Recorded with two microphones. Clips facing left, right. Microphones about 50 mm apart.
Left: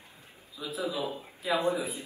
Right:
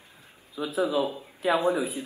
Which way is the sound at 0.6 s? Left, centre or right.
Right.